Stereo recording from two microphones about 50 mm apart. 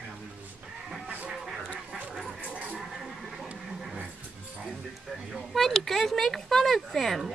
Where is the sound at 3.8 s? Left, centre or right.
Centre.